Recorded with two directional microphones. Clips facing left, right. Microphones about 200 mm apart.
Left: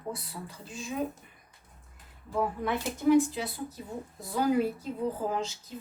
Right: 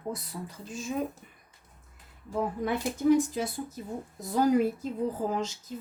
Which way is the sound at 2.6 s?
40° right (ahead or behind).